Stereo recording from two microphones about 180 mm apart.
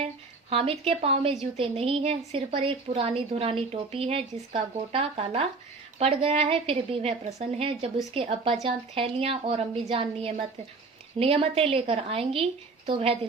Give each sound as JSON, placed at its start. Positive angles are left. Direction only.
{"t": 0.5, "sound": "a woman's voice", "side_deg": -30}